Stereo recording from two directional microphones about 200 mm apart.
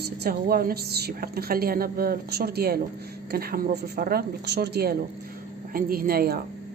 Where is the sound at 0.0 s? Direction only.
50° right (ahead or behind).